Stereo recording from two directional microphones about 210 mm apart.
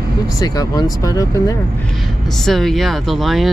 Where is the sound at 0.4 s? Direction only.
20° left (ahead or behind).